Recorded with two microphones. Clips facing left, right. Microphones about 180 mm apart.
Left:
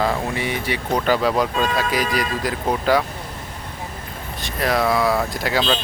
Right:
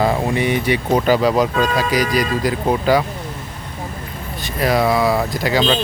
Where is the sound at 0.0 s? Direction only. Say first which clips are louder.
Right 5 dB; 20° right (ahead or behind).